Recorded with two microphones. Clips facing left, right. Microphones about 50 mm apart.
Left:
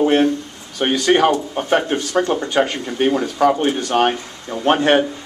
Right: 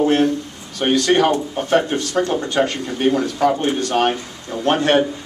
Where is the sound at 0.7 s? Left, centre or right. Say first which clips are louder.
Even; centre.